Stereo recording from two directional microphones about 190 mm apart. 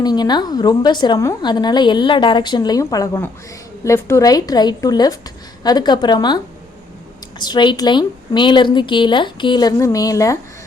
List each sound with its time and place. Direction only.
0.0 s a woman's voice: 20° left (ahead or behind)